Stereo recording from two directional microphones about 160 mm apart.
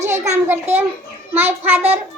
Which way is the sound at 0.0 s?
15° right (ahead or behind).